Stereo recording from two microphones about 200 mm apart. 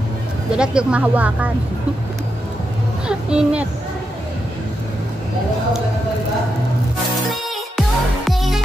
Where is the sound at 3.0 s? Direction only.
5° right (ahead or behind).